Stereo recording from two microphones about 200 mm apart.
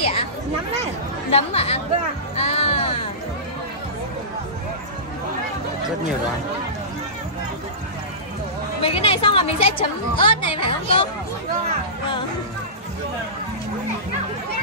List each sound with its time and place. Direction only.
0.0 s a sound: 30° left (ahead or behind)
1.3 s speech: 30° left (ahead or behind)
2.3 s music: 30° left (ahead or behind)
8.8 s a woman's voice: 30° left (ahead or behind)